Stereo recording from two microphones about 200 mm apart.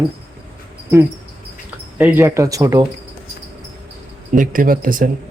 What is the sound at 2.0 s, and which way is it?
Speech, 10° right (ahead or behind).